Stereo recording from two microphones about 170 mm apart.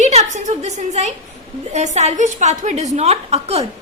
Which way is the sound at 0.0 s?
40° right (ahead or behind).